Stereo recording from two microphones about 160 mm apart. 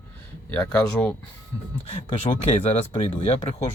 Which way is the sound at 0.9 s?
5° left (ahead or behind).